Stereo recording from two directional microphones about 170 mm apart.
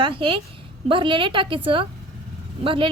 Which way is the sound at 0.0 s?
30° right (ahead or behind).